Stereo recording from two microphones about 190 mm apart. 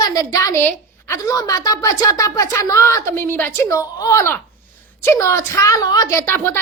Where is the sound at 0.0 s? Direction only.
20° left (ahead or behind).